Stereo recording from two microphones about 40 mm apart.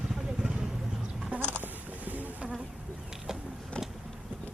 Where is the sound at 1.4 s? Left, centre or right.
Right.